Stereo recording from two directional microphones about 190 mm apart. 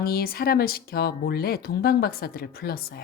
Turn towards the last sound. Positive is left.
turn(degrees=55)  # may be behind; listen again after turning